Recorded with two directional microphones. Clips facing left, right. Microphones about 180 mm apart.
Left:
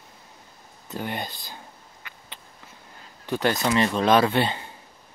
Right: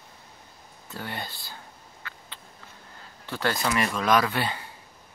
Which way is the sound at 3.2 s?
20° left (ahead or behind).